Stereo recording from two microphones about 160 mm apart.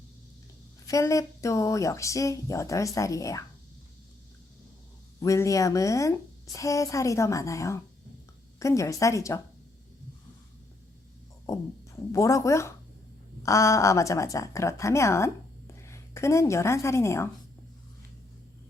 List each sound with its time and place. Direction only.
0.9 s a woman's voice: 20° left (ahead or behind)
5.2 s a woman's voice: 20° left (ahead or behind)
11.4 s a woman's voice: 20° left (ahead or behind)